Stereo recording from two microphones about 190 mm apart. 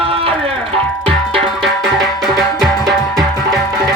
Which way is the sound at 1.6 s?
Centre (ahead or behind).